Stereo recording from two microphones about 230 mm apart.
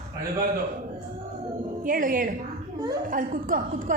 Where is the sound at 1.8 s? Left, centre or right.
Right.